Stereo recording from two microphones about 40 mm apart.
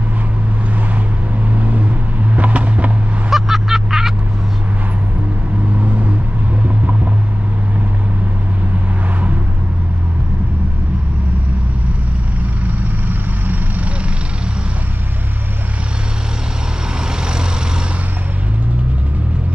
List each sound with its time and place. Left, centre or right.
1.5 s vehicle: right
3.3 s vehicle: centre
12.7 s vehicle: right